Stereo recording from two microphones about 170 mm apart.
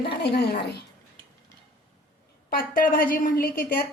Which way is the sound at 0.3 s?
70° left (ahead or behind).